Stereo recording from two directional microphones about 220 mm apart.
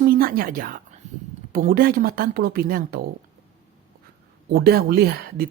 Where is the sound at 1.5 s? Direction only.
40° right (ahead or behind).